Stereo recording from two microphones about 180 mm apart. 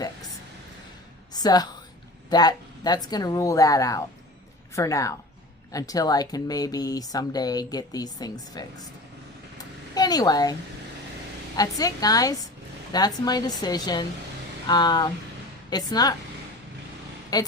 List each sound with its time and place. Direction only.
1.3 s a sound: 20° left (ahead or behind)
2.3 s a woman's voice: 20° left (ahead or behind)
9.9 s speech: 20° left (ahead or behind)
11.5 s speech: 20° left (ahead or behind)
17.3 s speech: 20° left (ahead or behind)